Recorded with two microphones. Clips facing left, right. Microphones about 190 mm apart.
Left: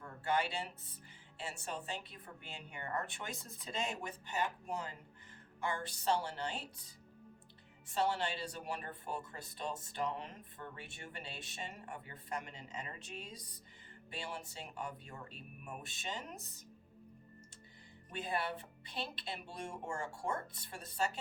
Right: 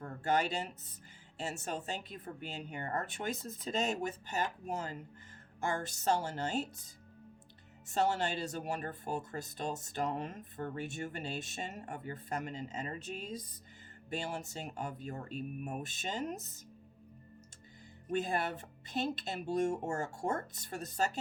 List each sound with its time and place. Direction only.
0.0 s speech: 45° right (ahead or behind)
18.1 s speech: 45° right (ahead or behind)